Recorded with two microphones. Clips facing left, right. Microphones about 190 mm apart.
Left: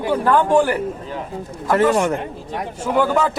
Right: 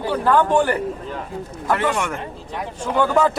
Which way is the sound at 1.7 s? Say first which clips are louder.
Left 5 dB; 40° left (ahead or behind).